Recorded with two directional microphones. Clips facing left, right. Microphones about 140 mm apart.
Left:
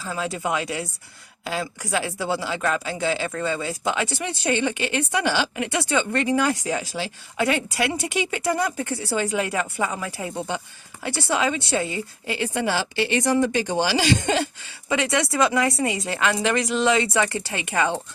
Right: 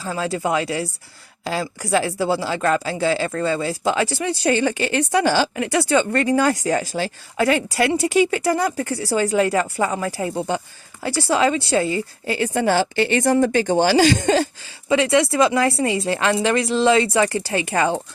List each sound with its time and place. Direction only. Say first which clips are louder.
0.0 s a woman's voice: right 4 dB; 35° right (ahead or behind)
14.8 s a woman's voice: right 6 dB; 25° right (ahead or behind)